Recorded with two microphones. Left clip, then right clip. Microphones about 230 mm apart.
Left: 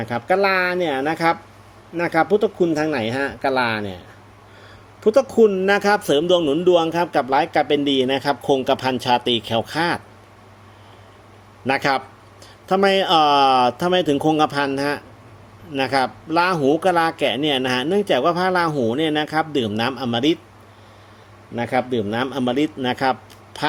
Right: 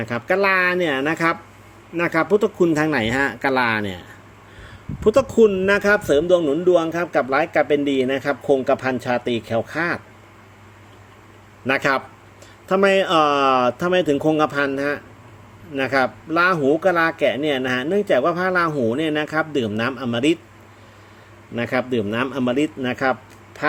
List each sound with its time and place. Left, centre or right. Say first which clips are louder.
0.0 s speech: left 1 dB; centre
5.0 s speech: even; centre
11.6 s speech: even; centre
21.5 s a man's voice: left 1 dB; centre